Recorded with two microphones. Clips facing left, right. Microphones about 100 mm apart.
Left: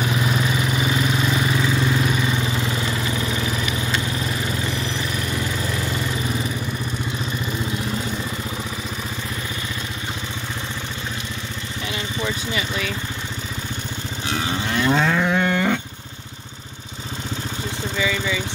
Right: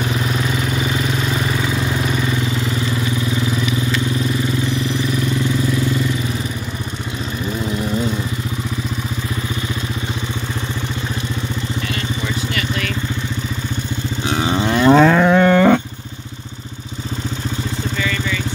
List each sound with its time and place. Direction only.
12.5 s vehicle: 10° left (ahead or behind)
14.4 s livestock: 30° right (ahead or behind)
14.9 s moo: 65° right (ahead or behind)
17.9 s vehicle: 10° left (ahead or behind)